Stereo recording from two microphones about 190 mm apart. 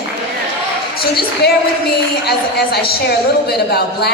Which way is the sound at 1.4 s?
55° left (ahead or behind).